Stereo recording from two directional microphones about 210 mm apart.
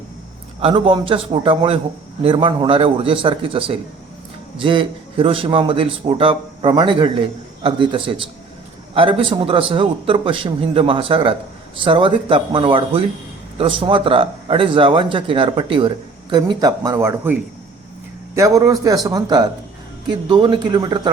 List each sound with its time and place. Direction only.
0.6 s a man's voice: 25° right (ahead or behind)
18.3 s a man's voice: 15° right (ahead or behind)